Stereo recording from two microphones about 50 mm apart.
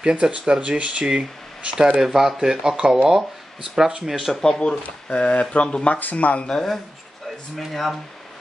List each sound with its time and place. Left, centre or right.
0.1 s speech: right
2.0 s speech: centre
4.3 s speech: centre
5.9 s speech: left
6.4 s speech: centre